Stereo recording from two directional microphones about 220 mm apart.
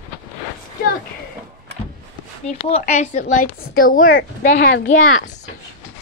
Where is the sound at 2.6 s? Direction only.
30° left (ahead or behind).